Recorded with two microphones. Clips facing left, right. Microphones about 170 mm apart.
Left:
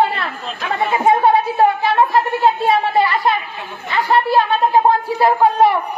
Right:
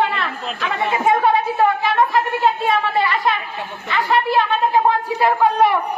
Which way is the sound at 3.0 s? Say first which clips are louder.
Left 3 dB; 35° left (ahead or behind).